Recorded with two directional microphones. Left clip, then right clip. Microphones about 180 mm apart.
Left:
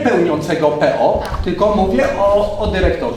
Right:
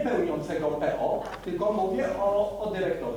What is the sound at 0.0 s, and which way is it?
Speech, 25° left (ahead or behind).